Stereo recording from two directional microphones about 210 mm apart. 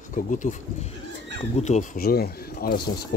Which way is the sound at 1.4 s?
30° left (ahead or behind).